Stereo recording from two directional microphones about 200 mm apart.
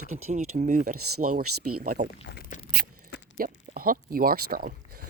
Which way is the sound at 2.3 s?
50° left (ahead or behind).